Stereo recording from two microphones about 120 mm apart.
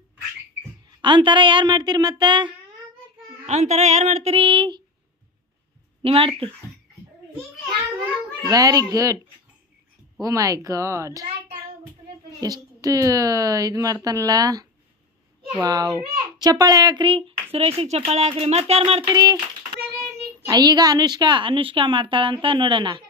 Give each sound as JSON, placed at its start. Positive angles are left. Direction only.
{"t": 1.0, "sound": "a woman's voice", "side_deg": -40}
{"t": 3.4, "sound": "speech", "side_deg": -70}
{"t": 6.0, "sound": "a child's voice", "side_deg": -50}
{"t": 8.5, "sound": "a woman's voice", "side_deg": -30}
{"t": 10.2, "sound": "a woman's voice", "side_deg": -30}
{"t": 12.4, "sound": "a woman's voice", "side_deg": -30}
{"t": 19.0, "sound": "a woman's voice", "side_deg": -30}
{"t": 20.4, "sound": "a child's voice", "side_deg": -35}